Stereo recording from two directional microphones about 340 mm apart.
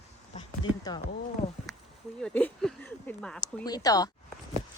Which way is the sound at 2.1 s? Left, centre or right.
Centre.